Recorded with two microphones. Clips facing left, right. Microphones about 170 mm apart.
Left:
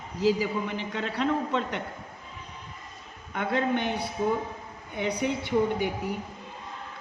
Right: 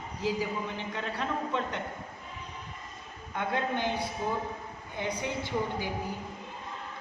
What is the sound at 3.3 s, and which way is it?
Speech, 70° left (ahead or behind).